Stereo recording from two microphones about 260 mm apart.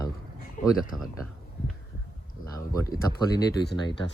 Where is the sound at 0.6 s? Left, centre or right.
Left.